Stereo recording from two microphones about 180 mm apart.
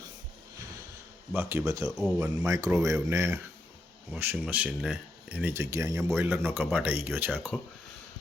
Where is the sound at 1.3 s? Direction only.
10° right (ahead or behind).